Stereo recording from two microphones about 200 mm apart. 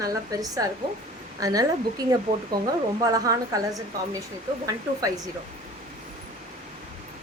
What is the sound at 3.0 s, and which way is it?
A woman's voice, 15° right (ahead or behind).